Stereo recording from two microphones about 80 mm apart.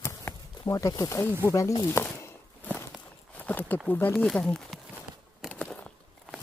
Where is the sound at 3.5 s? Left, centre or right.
Left.